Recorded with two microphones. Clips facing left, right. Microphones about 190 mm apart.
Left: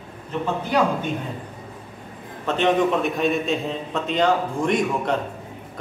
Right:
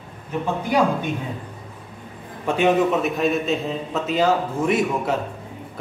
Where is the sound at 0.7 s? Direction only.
10° right (ahead or behind).